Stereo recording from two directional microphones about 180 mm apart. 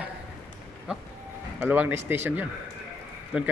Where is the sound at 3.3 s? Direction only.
5° right (ahead or behind).